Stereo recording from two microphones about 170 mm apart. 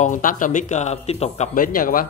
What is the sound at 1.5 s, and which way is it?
Speech, 55° left (ahead or behind).